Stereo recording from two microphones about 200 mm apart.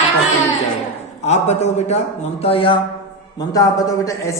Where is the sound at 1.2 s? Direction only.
35° left (ahead or behind).